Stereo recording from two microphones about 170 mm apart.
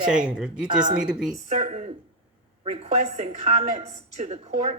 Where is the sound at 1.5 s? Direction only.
35° right (ahead or behind).